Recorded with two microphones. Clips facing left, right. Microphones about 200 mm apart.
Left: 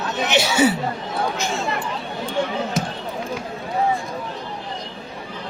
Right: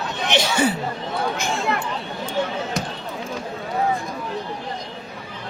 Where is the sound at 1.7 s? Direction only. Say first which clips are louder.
Right 2 dB; 60° right (ahead or behind).